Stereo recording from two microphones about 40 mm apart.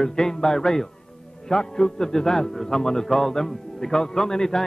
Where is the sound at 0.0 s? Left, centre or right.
Centre.